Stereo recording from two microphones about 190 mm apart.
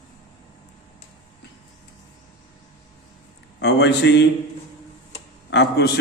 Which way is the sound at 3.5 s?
70° left (ahead or behind).